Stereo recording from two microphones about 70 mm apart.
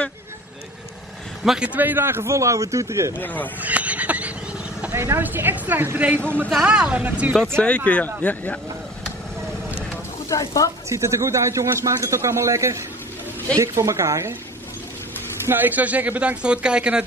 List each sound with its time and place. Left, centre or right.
1.4 s a man's voice: centre
1.7 s speech: right
3.2 s speech: left
3.6 s a sound: right
4.9 s a man's voice: right
6.5 s speech: centre
7.6 s speech: centre
10.3 s speech: left
10.9 s speech: right
15.4 s a man's voice: right